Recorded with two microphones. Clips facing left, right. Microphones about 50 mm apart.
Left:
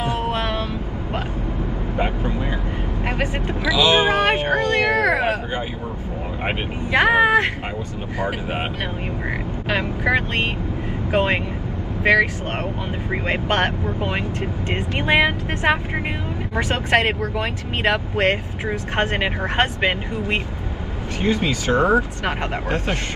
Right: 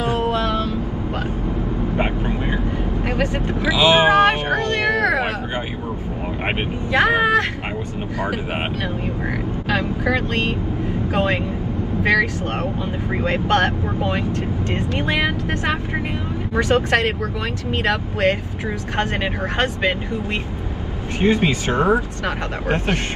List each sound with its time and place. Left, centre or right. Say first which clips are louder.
0.3 s vehicle: right 3 dB; left
2.0 s vehicle: left 1 dB; right
3.6 s vehicle: right 2 dB; right
4.6 s a sound: left 1 dB; left
6.9 s vehicle: left 1 dB; left
9.7 s speech: even; left
21.2 s speech: right 3 dB; right